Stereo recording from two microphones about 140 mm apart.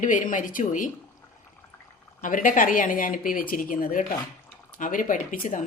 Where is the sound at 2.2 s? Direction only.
70° left (ahead or behind).